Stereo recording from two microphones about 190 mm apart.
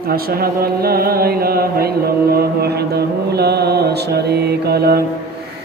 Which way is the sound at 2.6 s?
55° right (ahead or behind).